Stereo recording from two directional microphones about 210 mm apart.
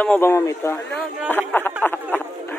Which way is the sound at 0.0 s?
10° left (ahead or behind).